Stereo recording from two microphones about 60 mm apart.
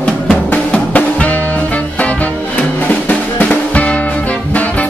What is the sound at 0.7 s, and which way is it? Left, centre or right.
Music, left.